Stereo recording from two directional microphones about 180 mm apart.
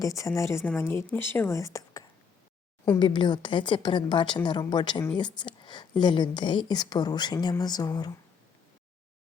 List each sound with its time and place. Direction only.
0.0 s speech: 20° left (ahead or behind)